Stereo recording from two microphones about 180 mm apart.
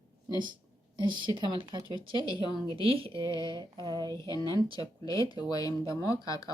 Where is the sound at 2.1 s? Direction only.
25° left (ahead or behind).